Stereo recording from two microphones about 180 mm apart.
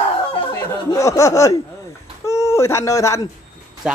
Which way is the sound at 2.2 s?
15° left (ahead or behind).